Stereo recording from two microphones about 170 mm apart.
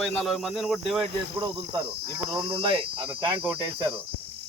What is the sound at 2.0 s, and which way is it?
Speech, 30° right (ahead or behind).